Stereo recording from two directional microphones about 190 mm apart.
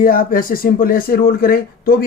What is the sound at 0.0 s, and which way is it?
Speech, 50° left (ahead or behind).